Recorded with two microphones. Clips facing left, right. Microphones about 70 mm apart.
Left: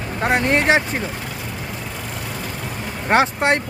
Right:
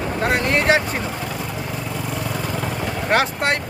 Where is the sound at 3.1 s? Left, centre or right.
Centre.